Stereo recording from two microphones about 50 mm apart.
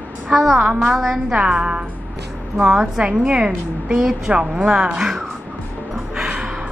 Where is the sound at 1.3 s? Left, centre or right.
Centre.